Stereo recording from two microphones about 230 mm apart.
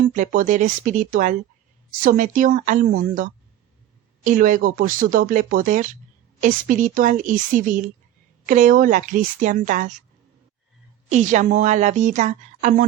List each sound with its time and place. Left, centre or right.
0.2 s a woman's voice: right
11.1 s a woman's voice: right